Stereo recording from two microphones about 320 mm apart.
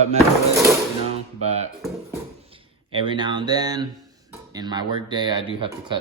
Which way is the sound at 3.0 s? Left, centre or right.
Centre.